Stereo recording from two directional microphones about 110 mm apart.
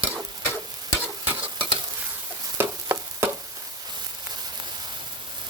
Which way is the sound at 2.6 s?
20° right (ahead or behind).